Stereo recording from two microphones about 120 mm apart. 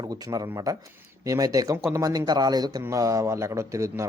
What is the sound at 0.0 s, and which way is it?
Speech, 30° right (ahead or behind).